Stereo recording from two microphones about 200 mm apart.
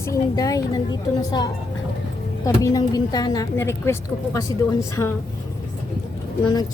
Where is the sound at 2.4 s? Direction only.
15° left (ahead or behind).